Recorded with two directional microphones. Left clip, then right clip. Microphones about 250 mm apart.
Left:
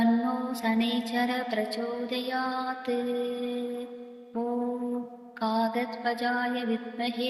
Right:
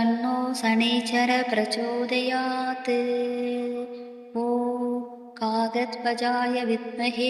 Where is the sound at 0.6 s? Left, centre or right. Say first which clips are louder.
Right 5 dB; right.